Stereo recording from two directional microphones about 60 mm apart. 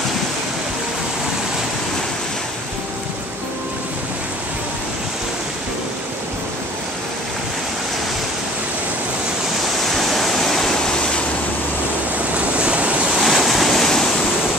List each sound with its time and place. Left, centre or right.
9.8 s waterfall: centre
12.3 s waves: centre
13.1 s waves: centre